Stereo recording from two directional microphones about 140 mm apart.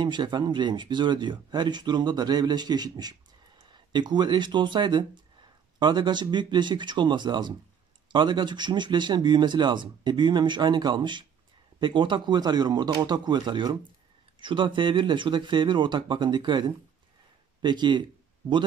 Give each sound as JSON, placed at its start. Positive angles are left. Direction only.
{"t": 0.0, "sound": "speech", "side_deg": -35}